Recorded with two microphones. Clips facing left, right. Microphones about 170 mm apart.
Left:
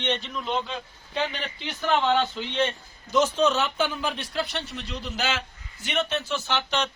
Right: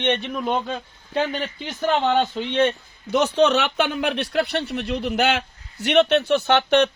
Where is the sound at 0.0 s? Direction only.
60° right (ahead or behind).